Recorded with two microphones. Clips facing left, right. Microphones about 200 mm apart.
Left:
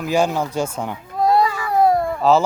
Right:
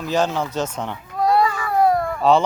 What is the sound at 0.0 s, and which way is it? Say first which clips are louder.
Speech: left 2 dB; 10° left (ahead or behind).